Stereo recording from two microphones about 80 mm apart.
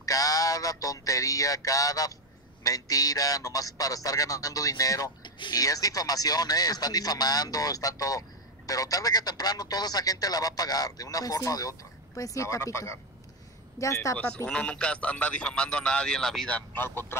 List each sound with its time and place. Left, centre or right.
0.0 s music: left
2.6 s speech: left
14.1 s speech: centre
16.5 s speech: left